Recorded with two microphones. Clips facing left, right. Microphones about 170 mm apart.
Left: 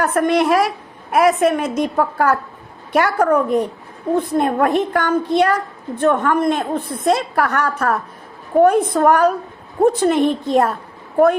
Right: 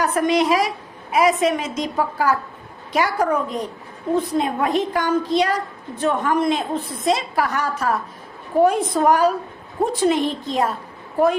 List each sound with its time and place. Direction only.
0.0 s a woman's voice: 55° left (ahead or behind)